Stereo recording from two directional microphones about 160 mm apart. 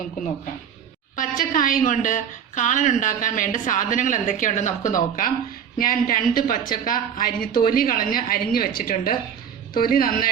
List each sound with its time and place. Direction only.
1.1 s a woman's voice: 55° left (ahead or behind)